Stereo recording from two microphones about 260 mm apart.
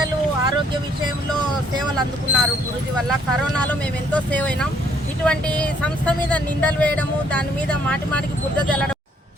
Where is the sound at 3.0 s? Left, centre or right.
Centre.